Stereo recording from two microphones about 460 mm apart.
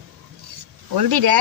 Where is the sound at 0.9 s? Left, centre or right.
Right.